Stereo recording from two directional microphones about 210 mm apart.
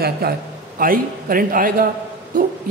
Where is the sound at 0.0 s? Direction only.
45° right (ahead or behind).